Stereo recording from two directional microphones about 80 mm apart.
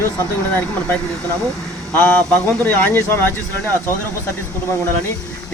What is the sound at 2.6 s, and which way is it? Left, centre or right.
Speech, left.